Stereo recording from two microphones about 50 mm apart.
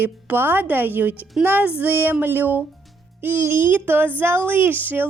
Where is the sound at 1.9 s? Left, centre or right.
Right.